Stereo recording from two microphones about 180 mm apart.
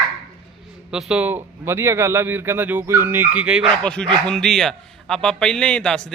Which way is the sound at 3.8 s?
5° left (ahead or behind).